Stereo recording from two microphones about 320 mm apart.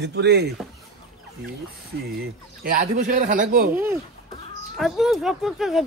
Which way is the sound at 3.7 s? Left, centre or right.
Centre.